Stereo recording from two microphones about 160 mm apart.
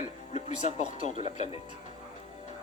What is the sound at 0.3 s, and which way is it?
Speech, 45° left (ahead or behind).